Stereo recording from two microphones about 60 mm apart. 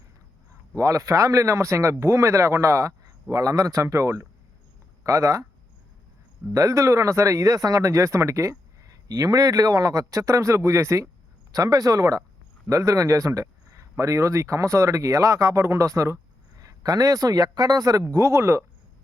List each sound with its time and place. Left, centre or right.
0.8 s speech: right
3.3 s speech: right
6.5 s speech: right
11.5 s speech: right
16.6 s speech: right
18.1 s speech: right